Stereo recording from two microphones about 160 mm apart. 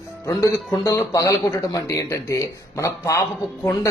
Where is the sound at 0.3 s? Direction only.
20° left (ahead or behind).